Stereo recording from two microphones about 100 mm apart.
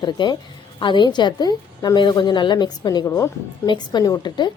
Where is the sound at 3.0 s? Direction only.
30° left (ahead or behind).